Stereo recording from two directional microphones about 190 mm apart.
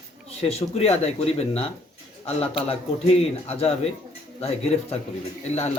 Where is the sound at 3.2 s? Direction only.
35° left (ahead or behind).